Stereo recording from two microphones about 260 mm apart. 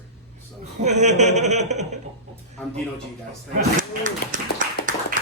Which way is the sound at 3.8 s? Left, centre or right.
Right.